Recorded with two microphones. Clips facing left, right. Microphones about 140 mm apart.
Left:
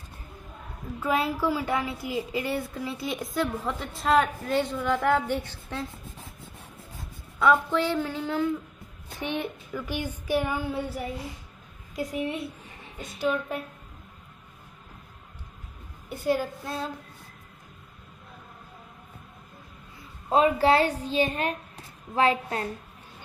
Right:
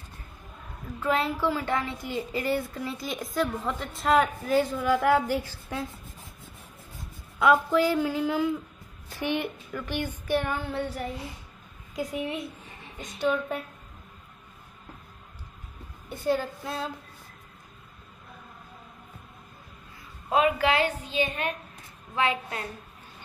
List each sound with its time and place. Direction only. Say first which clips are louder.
1.0 s a woman's voice: even; 10° left (ahead or behind); by 5.9 s 10° right (ahead or behind)
7.3 s a woman's voice: right 1 dB; 5° right (ahead or behind); by 11.1 s 10° left (ahead or behind)
11.9 s a woman's voice: left 1 dB; centre (ahead or behind)
16.1 s a woman's voice: left 1 dB; 10° left (ahead or behind)
20.2 s a woman's voice: left 3 dB; 35° left (ahead or behind)